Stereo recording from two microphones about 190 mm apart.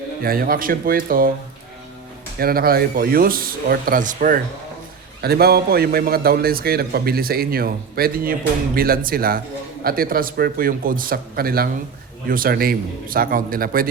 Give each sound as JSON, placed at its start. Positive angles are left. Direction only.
{"t": 0.2, "sound": "a man's voice", "side_deg": -50}
{"t": 2.4, "sound": "a man's voice", "side_deg": -50}
{"t": 5.2, "sound": "a man's voice", "side_deg": -55}